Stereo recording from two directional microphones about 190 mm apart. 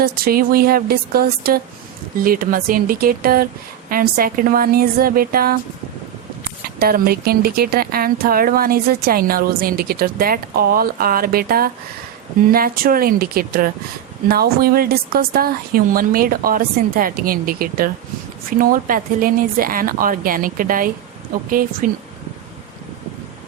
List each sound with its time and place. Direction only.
0.0 s speech: 50° right (ahead or behind)
6.7 s speech: 50° right (ahead or behind)